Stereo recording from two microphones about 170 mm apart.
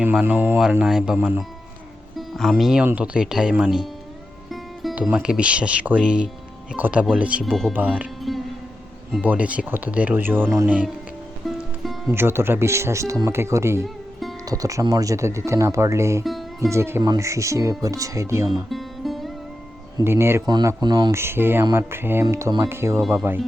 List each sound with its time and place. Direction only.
0.0 s speech: 5° right (ahead or behind)
4.5 s music: centre (ahead or behind)
5.0 s speech: 5° right (ahead or behind)
7.4 s speech: 5° left (ahead or behind)
7.7 s speech: 10° right (ahead or behind)
11.4 s music: centre (ahead or behind)
12.0 s speech: 15° right (ahead or behind)
16.2 s music: centre (ahead or behind)
16.6 s speech: 15° right (ahead or behind)
18.4 s music: centre (ahead or behind)
20.1 s speech: 15° right (ahead or behind)